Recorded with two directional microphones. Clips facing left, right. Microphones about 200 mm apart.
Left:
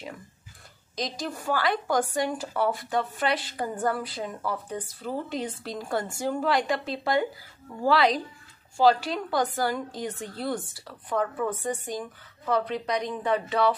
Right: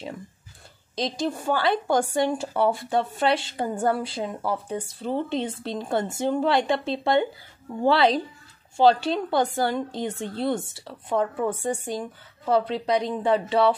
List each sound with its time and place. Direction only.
0.9 s speech: 25° right (ahead or behind)